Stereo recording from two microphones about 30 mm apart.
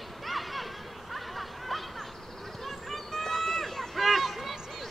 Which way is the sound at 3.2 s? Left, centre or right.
Centre.